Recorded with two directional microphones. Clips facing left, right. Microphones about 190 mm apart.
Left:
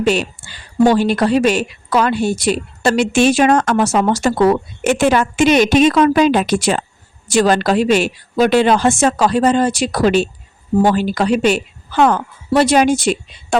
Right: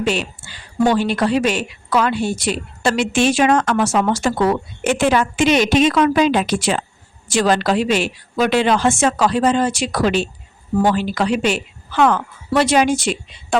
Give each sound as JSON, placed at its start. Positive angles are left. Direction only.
{"t": 0.0, "sound": "speech", "side_deg": 40}